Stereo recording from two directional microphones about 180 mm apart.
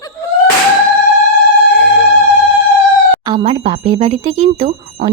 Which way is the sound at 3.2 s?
25° right (ahead or behind).